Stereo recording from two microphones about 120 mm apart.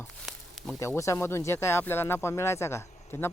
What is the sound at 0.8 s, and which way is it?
Speech, 25° left (ahead or behind).